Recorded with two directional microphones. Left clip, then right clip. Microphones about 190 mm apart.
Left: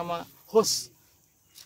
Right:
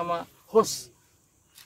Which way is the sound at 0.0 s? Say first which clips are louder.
Right 3 dB; 30° left (ahead or behind).